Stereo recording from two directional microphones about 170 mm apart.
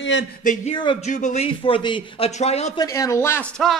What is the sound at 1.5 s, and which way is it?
Speech, 30° left (ahead or behind).